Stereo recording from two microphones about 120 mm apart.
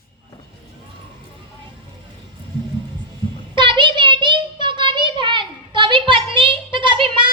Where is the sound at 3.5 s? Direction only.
45° right (ahead or behind).